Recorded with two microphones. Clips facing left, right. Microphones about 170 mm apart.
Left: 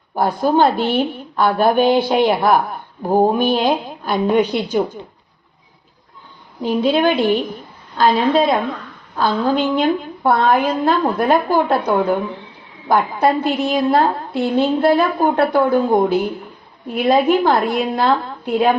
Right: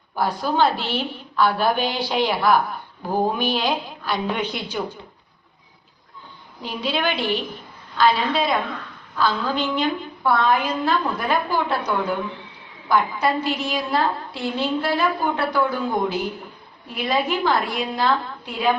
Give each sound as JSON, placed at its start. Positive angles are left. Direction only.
{"t": 0.2, "sound": "a woman's voice", "side_deg": 50}
{"t": 6.6, "sound": "a woman's voice", "side_deg": 45}